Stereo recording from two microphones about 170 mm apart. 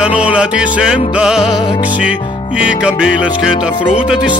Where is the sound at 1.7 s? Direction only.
45° left (ahead or behind).